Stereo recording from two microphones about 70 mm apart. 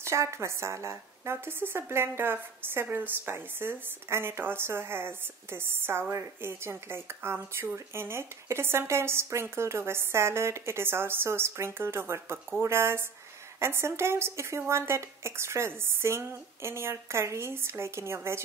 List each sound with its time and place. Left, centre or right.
0.0 s speech: right